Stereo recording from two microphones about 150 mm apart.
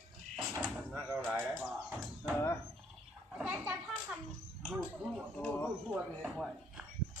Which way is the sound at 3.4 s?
5° right (ahead or behind).